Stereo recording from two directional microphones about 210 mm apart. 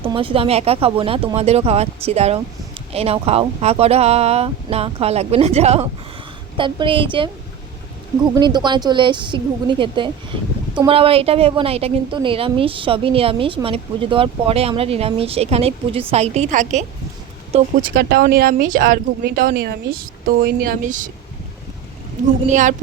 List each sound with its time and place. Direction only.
0.0 s a woman's voice: 25° right (ahead or behind)
8.4 s a woman's voice: 20° right (ahead or behind); by 16.8 s 35° right (ahead or behind)
17.9 s speech: 45° right (ahead or behind)
22.4 s a woman's voice: 35° right (ahead or behind)